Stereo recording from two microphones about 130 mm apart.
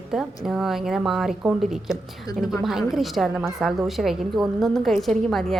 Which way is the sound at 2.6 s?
5° right (ahead or behind).